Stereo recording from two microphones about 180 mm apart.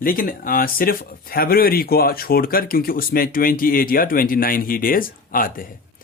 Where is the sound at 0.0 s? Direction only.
50° left (ahead or behind).